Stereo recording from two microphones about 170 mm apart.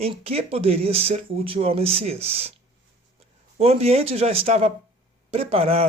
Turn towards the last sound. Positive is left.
turn(degrees=-35)  # may be behind; listen again after turning